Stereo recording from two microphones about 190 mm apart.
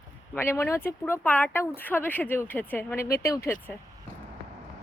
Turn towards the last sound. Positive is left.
turn(degrees=15)  # may be behind; listen again after turning